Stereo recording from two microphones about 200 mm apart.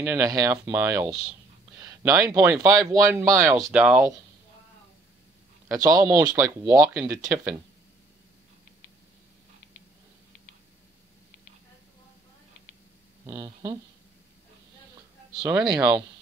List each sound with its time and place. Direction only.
0.0 s speech: 10° right (ahead or behind)
3.6 s speech: 5° right (ahead or behind)
5.7 s speech: 20° right (ahead or behind)
13.3 s speech: 15° right (ahead or behind)
15.3 s speech: 20° right (ahead or behind)